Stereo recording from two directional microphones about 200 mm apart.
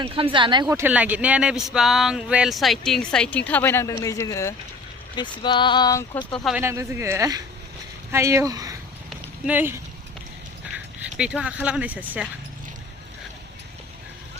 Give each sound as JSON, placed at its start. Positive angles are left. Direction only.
{"t": 0.0, "sound": "a man's voice", "side_deg": -25}
{"t": 6.3, "sound": "speech", "side_deg": 0}
{"t": 6.6, "sound": "a man's voice", "side_deg": -15}
{"t": 9.0, "sound": "clip-clop", "side_deg": -10}
{"t": 11.2, "sound": "a man's voice", "side_deg": -5}